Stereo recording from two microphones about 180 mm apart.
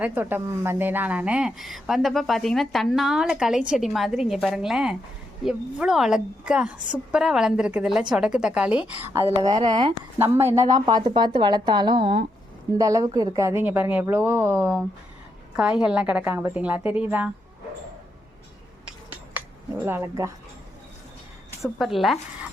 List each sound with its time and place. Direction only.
0.0 s a woman's voice: 10° right (ahead or behind)
9.4 s speech: 25° right (ahead or behind)
12.7 s a woman's voice: 20° right (ahead or behind)
19.3 s speech: 10° right (ahead or behind)
21.8 s speech: centre (ahead or behind)